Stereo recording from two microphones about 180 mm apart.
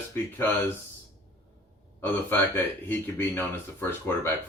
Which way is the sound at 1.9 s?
10° left (ahead or behind).